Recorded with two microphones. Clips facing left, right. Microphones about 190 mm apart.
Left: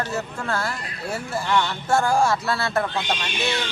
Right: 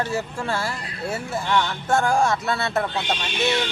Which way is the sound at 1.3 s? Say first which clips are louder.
Left 1 dB; centre (ahead or behind).